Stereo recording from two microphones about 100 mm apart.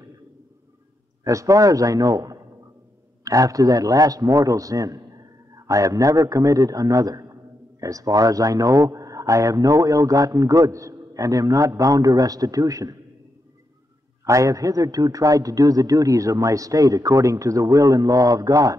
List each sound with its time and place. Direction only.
1.2 s a man's voice: 35° right (ahead or behind)
14.2 s a man's voice: 30° right (ahead or behind)